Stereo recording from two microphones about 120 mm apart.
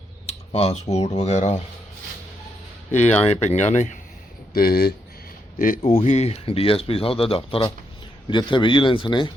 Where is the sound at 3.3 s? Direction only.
70° left (ahead or behind); by 4.0 s 90° left.